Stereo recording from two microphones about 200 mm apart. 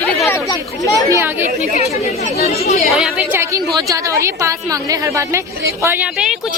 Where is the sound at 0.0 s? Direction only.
10° left (ahead or behind).